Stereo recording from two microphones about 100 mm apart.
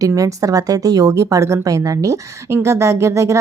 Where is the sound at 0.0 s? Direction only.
35° right (ahead or behind).